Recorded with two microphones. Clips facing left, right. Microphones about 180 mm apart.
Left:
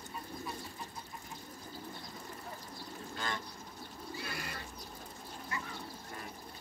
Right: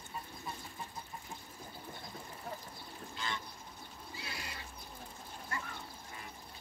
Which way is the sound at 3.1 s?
50° left (ahead or behind).